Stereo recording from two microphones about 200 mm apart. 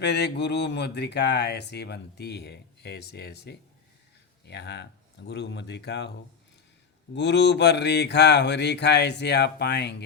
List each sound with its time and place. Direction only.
0.0 s speech: 60° left (ahead or behind)
7.1 s speech: 60° left (ahead or behind)